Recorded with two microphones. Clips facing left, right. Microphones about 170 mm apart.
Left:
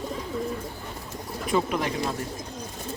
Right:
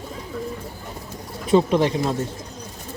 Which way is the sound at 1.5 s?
30° right (ahead or behind).